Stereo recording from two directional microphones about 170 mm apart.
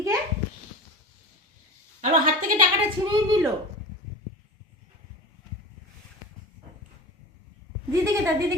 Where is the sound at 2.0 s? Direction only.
50° right (ahead or behind).